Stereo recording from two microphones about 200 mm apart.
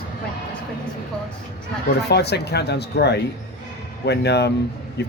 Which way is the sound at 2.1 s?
55° left (ahead or behind).